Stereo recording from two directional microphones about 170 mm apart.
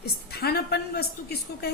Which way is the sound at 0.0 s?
70° left (ahead or behind).